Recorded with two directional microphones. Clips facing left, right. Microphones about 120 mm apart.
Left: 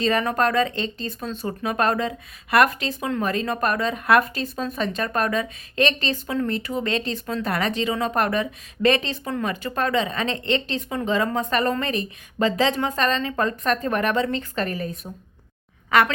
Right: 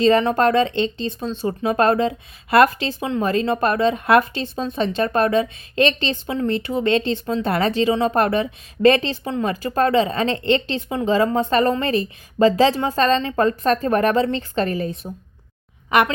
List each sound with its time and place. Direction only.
0.0 s a woman's voice: 25° right (ahead or behind)